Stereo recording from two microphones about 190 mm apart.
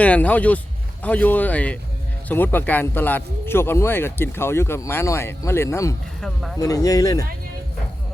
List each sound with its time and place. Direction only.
0.0 s speech: 5° left (ahead or behind)
6.2 s speech: centre (ahead or behind)
6.6 s speech: 15° left (ahead or behind)